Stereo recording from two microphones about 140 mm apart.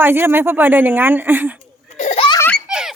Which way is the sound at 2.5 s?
5° right (ahead or behind).